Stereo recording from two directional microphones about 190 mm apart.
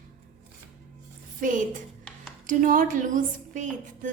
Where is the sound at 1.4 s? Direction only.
40° right (ahead or behind).